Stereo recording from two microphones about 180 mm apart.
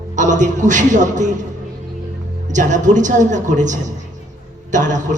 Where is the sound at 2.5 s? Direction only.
45° right (ahead or behind).